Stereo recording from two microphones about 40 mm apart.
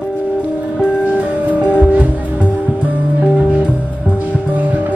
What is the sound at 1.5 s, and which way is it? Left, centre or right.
Music, right.